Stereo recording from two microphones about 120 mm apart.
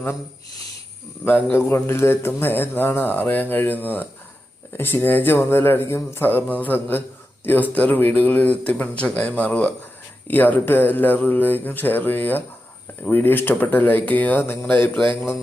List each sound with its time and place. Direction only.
1.2 s a man's voice: 15° left (ahead or behind)